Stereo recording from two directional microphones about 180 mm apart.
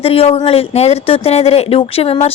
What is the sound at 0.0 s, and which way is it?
Speech, 30° left (ahead or behind).